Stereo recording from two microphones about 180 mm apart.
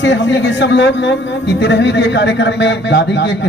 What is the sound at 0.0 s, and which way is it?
A man's voice, 85° left.